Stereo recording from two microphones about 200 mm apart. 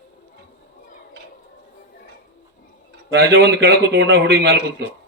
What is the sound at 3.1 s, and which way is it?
A man's voice, 60° right (ahead or behind).